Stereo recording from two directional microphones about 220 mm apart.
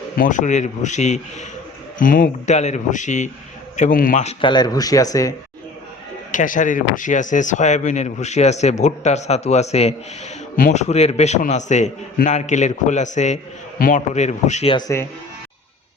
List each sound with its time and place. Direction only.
0.2 s speech: 35° left (ahead or behind); by 5.3 s 15° left (ahead or behind)
6.3 s speech: 35° left (ahead or behind); by 15.0 s 15° left (ahead or behind)